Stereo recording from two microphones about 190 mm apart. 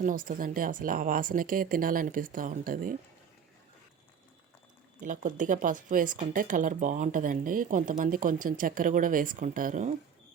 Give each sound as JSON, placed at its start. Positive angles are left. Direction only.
{"t": 0.0, "sound": "speech", "side_deg": -45}
{"t": 4.9, "sound": "speech", "side_deg": -45}